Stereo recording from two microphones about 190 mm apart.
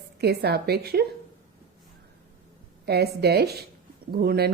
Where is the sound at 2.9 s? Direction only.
60° right (ahead or behind).